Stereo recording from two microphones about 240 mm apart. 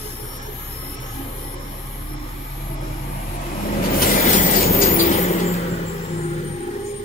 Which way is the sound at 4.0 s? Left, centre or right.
Left.